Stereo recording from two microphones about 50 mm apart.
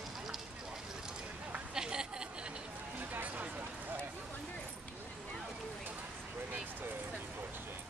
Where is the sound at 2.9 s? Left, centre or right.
Right.